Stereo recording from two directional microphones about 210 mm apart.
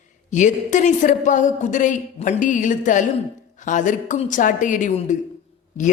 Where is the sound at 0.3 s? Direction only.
35° left (ahead or behind).